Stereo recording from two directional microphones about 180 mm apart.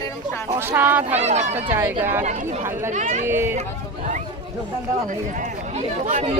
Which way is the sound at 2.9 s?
45° right (ahead or behind).